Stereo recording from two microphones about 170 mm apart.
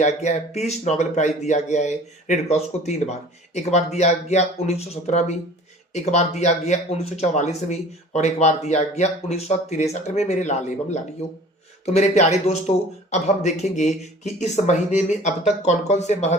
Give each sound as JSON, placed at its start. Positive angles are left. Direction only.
{"t": 0.2, "sound": "a man's voice", "side_deg": 40}